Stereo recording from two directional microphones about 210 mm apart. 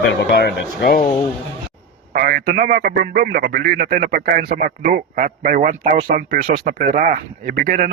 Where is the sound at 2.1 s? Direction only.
45° right (ahead or behind).